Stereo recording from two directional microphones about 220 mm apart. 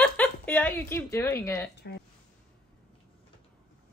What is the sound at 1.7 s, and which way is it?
Speech, 50° left (ahead or behind).